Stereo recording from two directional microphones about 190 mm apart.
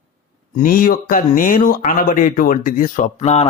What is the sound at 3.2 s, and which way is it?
Speech, 35° left (ahead or behind).